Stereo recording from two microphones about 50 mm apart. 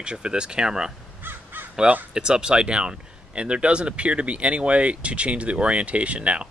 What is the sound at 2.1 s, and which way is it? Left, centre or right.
Speech, centre.